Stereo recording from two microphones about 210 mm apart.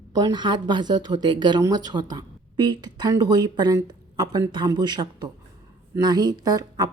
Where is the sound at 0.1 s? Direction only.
20° right (ahead or behind).